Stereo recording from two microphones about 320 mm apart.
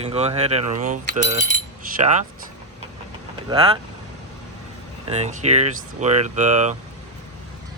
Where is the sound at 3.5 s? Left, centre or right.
Centre.